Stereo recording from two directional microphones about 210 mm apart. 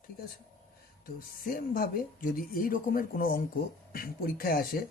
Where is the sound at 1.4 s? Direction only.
40° left (ahead or behind).